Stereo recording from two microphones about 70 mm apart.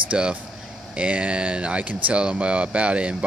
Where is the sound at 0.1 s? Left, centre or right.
Centre.